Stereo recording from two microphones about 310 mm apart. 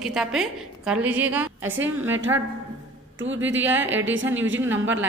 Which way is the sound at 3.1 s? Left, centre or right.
Right.